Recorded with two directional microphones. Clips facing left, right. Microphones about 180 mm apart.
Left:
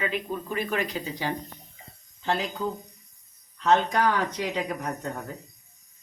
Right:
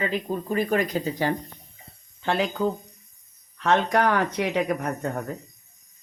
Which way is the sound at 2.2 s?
70° right (ahead or behind).